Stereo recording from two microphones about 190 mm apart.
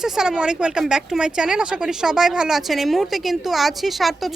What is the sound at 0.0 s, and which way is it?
Speech, 5° right (ahead or behind).